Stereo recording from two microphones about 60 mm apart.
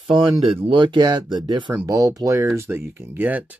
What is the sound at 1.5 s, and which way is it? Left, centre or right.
Speech, right.